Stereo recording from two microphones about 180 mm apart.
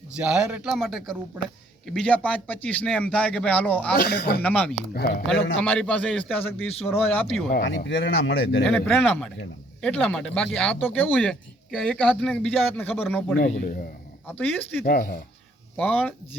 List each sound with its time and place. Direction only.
0.2 s speech: 5° right (ahead or behind)
3.9 s speech: 60° left (ahead or behind)
4.4 s speech: 5° left (ahead or behind)
4.9 s speech: 60° left (ahead or behind)
5.6 s speech: 10° left (ahead or behind)
7.5 s a man's voice: 65° left (ahead or behind); by 8.6 s 80° left
8.7 s speech: 10° left (ahead or behind)
13.4 s speech: 50° left (ahead or behind)
14.3 s speech: 10° left (ahead or behind)
14.8 s speech: 50° left (ahead or behind)
15.8 s speech: 5° left (ahead or behind)